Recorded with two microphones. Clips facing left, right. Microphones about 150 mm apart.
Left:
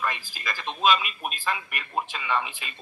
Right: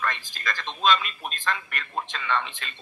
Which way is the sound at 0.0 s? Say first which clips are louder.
Right 1 dB; 10° left (ahead or behind).